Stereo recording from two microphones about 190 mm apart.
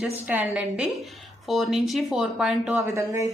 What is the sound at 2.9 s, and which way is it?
Speech, 15° right (ahead or behind).